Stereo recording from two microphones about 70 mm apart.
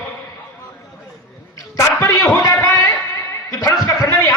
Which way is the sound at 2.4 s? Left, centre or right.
Left.